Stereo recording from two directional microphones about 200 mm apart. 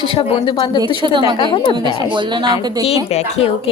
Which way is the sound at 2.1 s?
25° right (ahead or behind).